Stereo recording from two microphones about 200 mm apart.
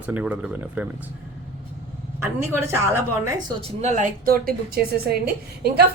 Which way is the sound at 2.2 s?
15° right (ahead or behind).